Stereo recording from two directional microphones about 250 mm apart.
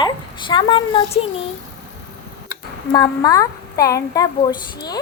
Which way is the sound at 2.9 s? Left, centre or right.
Centre.